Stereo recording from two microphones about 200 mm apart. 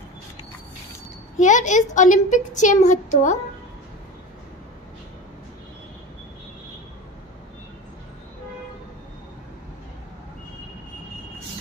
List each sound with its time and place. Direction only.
1.4 s speech: 35° left (ahead or behind)